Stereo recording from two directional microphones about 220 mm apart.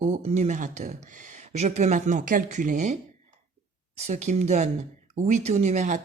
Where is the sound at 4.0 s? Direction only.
30° right (ahead or behind).